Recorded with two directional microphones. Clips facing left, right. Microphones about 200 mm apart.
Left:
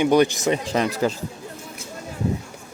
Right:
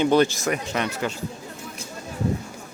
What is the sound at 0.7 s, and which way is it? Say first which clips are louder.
Speech: left 5 dB; 35° left (ahead or behind).